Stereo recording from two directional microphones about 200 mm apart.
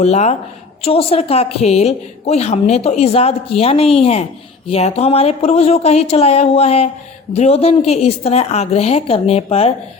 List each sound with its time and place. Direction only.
0.0 s a woman's voice: 35° left (ahead or behind)